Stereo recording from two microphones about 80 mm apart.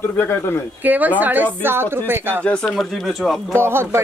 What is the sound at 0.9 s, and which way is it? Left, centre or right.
A woman's voice, right.